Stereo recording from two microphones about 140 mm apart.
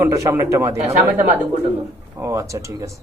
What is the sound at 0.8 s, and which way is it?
Speech, 55° right (ahead or behind).